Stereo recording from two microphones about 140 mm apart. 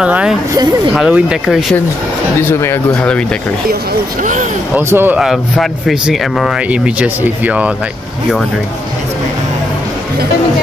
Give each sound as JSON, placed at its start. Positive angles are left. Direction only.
{"t": 0.0, "sound": "speech", "side_deg": -5}
{"t": 2.4, "sound": "speech", "side_deg": 15}
{"t": 4.2, "sound": "speech", "side_deg": -65}
{"t": 4.7, "sound": "speech", "side_deg": -15}
{"t": 5.2, "sound": "speech", "side_deg": 0}